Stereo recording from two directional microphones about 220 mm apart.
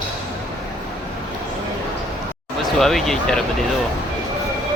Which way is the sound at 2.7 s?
Centre (ahead or behind).